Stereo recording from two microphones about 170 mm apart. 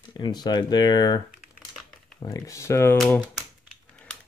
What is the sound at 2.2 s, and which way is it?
Speech, 20° left (ahead or behind).